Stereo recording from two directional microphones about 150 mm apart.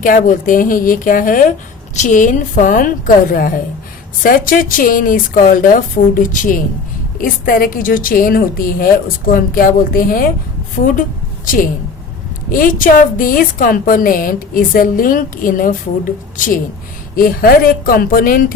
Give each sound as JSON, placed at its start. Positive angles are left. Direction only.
{"t": 0.0, "sound": "a woman's voice", "side_deg": 65}
{"t": 4.2, "sound": "a woman's voice", "side_deg": 70}
{"t": 12.5, "sound": "a woman's voice", "side_deg": 65}